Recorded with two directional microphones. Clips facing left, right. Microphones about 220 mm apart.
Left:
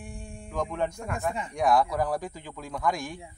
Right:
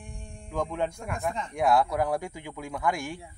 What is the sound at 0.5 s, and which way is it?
Speech, 10° right (ahead or behind).